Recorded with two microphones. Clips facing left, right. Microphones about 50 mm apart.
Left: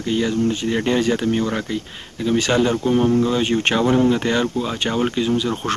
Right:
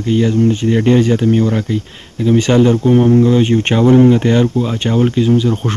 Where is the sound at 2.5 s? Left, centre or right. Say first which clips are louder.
Right 7 dB; centre.